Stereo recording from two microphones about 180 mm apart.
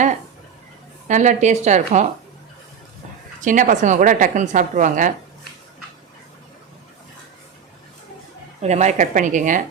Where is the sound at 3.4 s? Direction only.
45° right (ahead or behind).